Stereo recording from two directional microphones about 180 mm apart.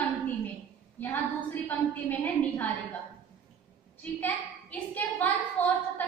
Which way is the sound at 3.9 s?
10° left (ahead or behind).